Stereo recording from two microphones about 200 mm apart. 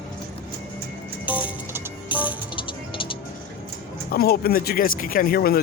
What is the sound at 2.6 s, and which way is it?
Music, 25° left (ahead or behind).